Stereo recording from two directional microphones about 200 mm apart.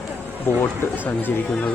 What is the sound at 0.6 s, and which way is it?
Speech, 10° left (ahead or behind).